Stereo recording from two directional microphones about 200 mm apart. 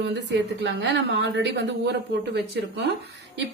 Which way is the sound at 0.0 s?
60° right (ahead or behind).